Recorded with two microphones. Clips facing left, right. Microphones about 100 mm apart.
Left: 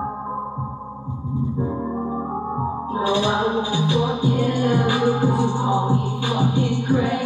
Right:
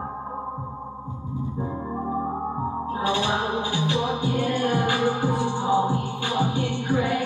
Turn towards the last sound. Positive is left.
turn(degrees=20)  # may be behind; listen again after turning